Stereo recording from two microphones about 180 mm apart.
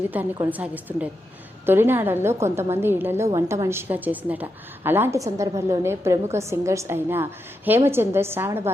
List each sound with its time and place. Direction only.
0.1 s a woman's voice: 10° right (ahead or behind)